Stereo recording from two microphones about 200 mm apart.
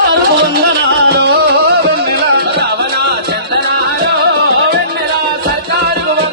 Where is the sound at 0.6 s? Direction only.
55° right (ahead or behind).